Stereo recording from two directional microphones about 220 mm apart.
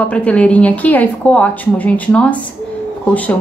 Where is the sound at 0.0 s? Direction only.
5° left (ahead or behind).